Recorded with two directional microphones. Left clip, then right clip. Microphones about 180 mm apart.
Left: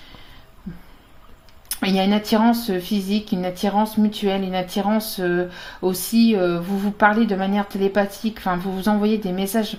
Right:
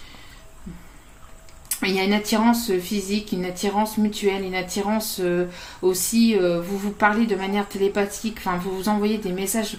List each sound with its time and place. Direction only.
1.8 s speech: 40° left (ahead or behind)